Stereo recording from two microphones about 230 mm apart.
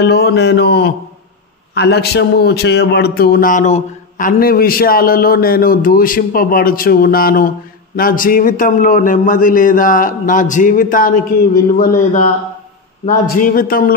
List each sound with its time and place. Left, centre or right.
0.0 s speech: left